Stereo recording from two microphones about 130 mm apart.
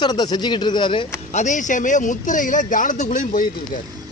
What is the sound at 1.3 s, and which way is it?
Speech, 70° left (ahead or behind).